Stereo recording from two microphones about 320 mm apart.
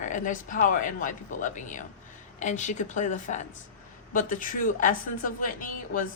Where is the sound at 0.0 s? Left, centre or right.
Left.